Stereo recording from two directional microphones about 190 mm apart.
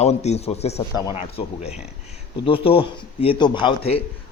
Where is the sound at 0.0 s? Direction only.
35° left (ahead or behind).